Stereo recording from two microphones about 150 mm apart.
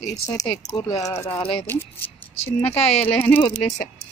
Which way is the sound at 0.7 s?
25° left (ahead or behind).